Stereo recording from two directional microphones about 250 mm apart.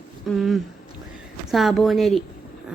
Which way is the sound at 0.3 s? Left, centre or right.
Centre.